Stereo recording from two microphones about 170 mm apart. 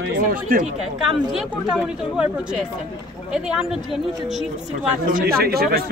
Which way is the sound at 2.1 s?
5° right (ahead or behind).